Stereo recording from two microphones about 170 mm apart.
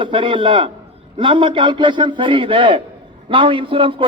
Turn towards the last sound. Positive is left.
turn(degrees=-30)  # may be behind; listen again after turning